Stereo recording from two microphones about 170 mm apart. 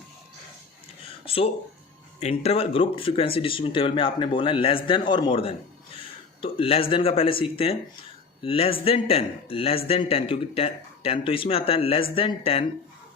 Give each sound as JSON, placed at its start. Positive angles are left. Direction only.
{"t": 1.2, "sound": "a man's voice", "side_deg": 35}